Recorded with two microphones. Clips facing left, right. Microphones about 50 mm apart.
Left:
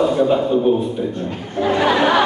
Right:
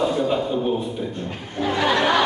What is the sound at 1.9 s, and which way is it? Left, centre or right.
Speech, centre.